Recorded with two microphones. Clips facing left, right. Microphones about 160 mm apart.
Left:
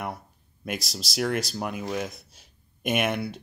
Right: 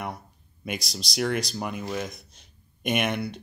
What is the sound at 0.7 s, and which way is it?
Speech, centre (ahead or behind).